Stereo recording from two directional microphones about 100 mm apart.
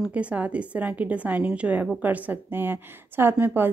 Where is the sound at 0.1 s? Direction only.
15° right (ahead or behind).